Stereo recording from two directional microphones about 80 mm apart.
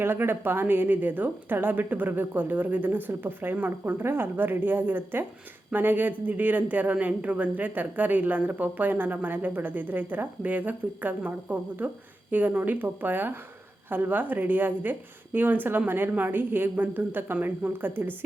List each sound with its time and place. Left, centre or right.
0.0 s a man's voice: right